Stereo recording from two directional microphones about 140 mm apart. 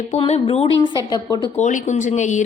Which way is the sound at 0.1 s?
50° left (ahead or behind).